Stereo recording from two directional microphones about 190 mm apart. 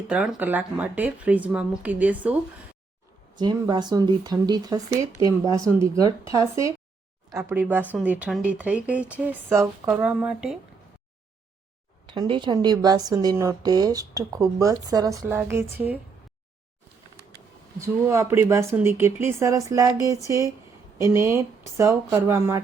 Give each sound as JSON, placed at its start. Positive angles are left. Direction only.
{"t": 0.1, "sound": "speech", "side_deg": -5}
{"t": 3.3, "sound": "a woman's voice", "side_deg": -20}
{"t": 12.0, "sound": "a woman's voice", "side_deg": -25}
{"t": 17.7, "sound": "speech", "side_deg": -15}